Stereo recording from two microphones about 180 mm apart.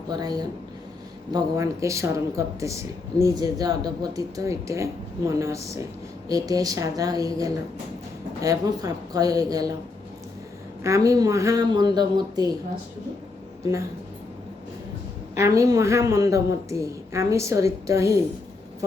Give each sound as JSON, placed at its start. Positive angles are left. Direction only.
{"t": 0.1, "sound": "speech", "side_deg": -20}
{"t": 10.8, "sound": "speech", "side_deg": -15}
{"t": 15.4, "sound": "speech", "side_deg": -15}